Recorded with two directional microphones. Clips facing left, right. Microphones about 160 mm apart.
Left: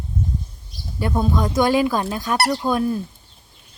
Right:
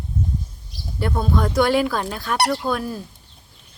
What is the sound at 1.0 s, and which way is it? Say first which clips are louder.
Speech: left 1 dB; 15° left (ahead or behind).